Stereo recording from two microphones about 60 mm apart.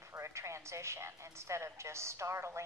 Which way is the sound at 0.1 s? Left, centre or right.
Right.